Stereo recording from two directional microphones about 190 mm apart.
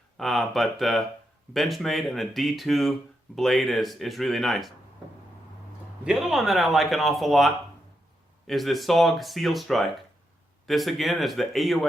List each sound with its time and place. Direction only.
0.2 s a man's voice: centre (ahead or behind)
6.1 s a man's voice: centre (ahead or behind)